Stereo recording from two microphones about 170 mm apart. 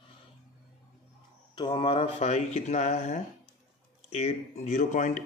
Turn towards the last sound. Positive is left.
turn(degrees=45)  # may be behind; listen again after turning